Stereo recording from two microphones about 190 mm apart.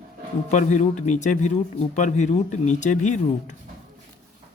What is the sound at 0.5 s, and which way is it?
Speech, 40° left (ahead or behind).